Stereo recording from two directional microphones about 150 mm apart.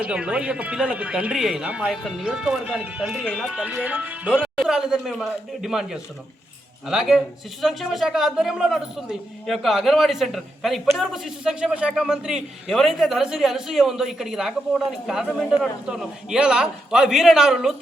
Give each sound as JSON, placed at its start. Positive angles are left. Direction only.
{"t": 0.0, "sound": "a man's voice", "side_deg": -5}